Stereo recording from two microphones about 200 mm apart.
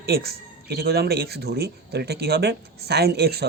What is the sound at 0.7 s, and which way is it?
Speech, 50° right (ahead or behind).